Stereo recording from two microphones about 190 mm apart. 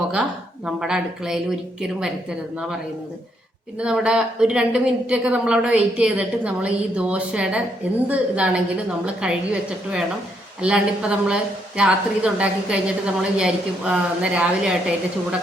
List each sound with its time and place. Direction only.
0.1 s a woman's voice: 5° right (ahead or behind)
3.8 s a woman's voice: 5° right (ahead or behind)